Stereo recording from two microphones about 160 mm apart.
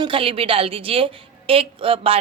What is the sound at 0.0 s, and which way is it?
A woman's voice, 35° right (ahead or behind).